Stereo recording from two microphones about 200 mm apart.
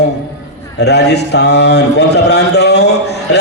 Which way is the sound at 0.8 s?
55° left (ahead or behind).